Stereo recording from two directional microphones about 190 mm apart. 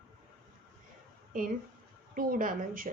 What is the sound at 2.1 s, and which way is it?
Speech, 45° right (ahead or behind).